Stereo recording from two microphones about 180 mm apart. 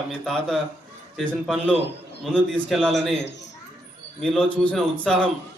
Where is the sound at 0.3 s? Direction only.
Centre (ahead or behind).